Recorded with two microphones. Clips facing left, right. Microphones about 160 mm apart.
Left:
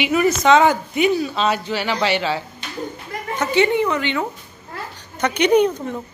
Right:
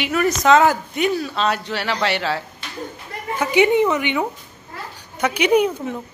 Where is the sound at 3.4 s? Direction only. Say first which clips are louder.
Right 2 dB; 15° right (ahead or behind).